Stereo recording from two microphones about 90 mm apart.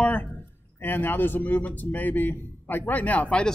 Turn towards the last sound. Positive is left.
turn(degrees=10)  # may be behind; listen again after turning